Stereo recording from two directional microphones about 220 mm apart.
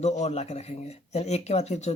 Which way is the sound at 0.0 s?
30° left (ahead or behind).